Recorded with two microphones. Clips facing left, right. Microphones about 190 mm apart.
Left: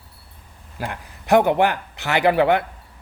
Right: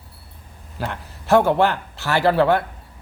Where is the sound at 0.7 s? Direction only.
10° left (ahead or behind).